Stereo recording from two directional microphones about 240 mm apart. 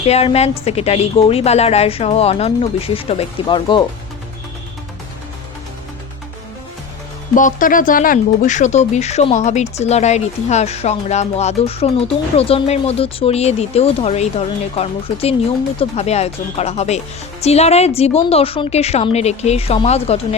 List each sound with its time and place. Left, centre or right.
0.0 s speech: left
7.3 s speech: left